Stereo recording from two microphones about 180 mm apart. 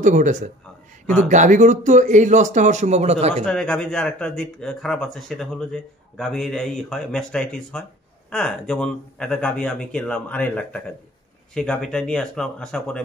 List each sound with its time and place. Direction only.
0.0 s a man's voice: 45° right (ahead or behind)
3.4 s speech: 5° left (ahead or behind)